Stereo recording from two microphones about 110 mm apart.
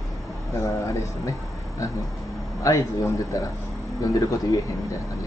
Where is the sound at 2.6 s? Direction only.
30° left (ahead or behind).